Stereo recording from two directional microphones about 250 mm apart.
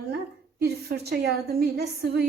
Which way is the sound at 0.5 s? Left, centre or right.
Right.